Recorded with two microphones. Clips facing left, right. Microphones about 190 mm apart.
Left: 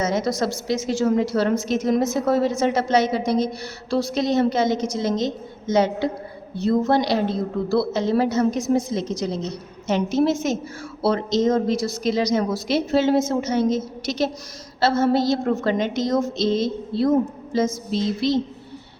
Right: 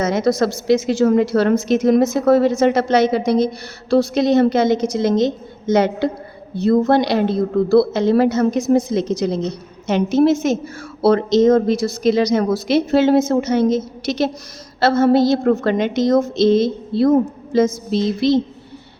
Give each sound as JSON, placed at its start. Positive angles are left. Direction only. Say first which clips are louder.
{"t": 0.0, "sound": "a woman's voice", "louder": "right 5 dB", "side_deg": -65}